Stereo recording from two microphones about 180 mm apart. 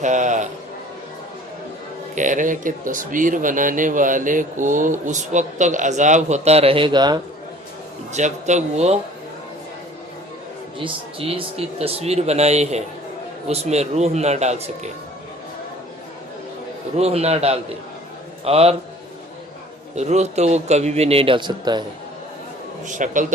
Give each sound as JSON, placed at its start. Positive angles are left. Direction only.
{"t": 0.0, "sound": "speech", "side_deg": -40}
{"t": 2.1, "sound": "speech", "side_deg": -45}
{"t": 8.1, "sound": "speech", "side_deg": -40}
{"t": 10.8, "sound": "speech", "side_deg": -30}
{"t": 17.0, "sound": "speech", "side_deg": -35}
{"t": 20.0, "sound": "speech", "side_deg": -40}
{"t": 22.9, "sound": "speech", "side_deg": -45}